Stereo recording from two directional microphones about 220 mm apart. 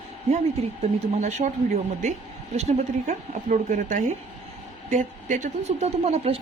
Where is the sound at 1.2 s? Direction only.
30° right (ahead or behind).